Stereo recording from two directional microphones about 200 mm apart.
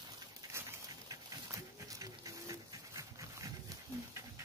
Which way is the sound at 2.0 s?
20° right (ahead or behind).